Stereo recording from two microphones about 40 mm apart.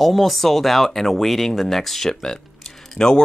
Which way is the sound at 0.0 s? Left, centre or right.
Centre.